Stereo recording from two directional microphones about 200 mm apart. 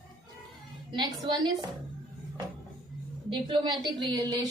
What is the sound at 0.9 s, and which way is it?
Speech, 20° right (ahead or behind).